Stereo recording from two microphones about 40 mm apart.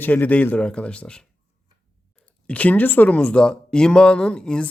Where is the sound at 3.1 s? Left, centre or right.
Left.